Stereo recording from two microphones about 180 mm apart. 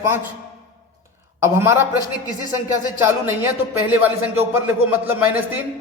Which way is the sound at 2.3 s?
20° left (ahead or behind).